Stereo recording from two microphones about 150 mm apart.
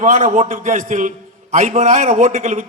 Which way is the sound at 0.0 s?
55° right (ahead or behind).